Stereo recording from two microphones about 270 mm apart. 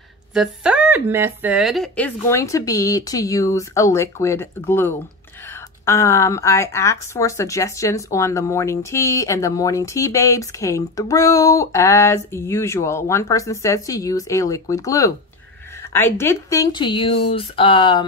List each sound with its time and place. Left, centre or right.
0.3 s a woman's voice: centre